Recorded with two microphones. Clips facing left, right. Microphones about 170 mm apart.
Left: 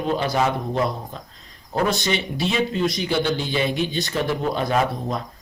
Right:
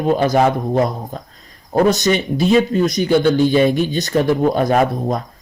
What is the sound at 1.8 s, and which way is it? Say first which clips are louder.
A man's voice: right 6 dB; 45° right (ahead or behind).